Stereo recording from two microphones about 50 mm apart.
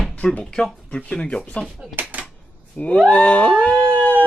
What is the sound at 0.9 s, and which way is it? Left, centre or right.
Speech, left.